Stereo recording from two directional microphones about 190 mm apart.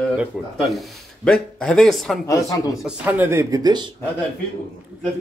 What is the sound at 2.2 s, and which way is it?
Speech, 15° left (ahead or behind).